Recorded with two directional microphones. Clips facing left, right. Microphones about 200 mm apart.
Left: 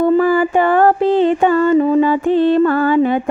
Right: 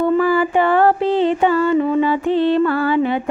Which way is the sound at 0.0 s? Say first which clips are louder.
Left 3 dB; 40° left (ahead or behind).